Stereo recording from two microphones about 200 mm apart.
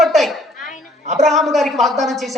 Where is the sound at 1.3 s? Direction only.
Centre (ahead or behind).